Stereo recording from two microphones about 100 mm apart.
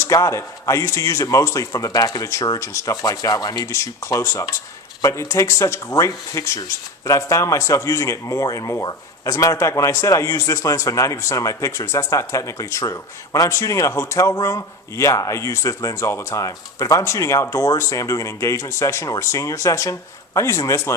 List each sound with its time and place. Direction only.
0.1 s speech: 30° left (ahead or behind)